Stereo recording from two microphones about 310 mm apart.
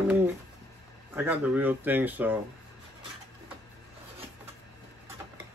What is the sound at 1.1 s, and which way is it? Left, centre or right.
Speech, centre.